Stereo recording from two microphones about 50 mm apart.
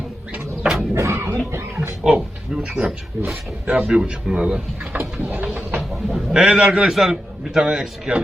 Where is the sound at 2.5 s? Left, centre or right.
Centre.